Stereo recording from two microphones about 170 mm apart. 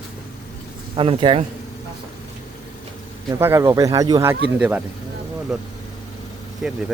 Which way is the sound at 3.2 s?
15° right (ahead or behind).